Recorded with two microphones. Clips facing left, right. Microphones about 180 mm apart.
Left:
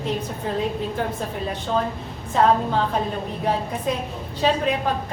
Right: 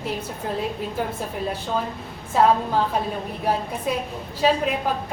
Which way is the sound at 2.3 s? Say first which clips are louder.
Even; 5° right (ahead or behind).